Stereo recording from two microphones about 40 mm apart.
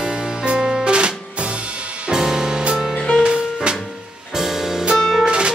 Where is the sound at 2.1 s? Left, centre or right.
Centre.